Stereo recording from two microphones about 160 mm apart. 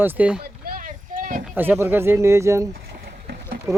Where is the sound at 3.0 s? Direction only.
75° right (ahead or behind).